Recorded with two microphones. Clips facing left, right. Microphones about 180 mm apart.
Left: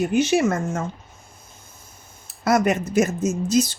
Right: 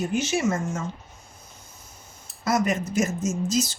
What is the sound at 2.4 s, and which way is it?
Speech, 65° left (ahead or behind).